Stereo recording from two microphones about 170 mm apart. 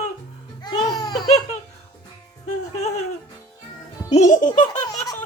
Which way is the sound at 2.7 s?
40° left (ahead or behind).